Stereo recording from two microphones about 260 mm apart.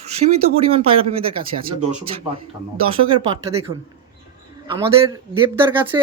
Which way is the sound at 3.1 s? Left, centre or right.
Centre.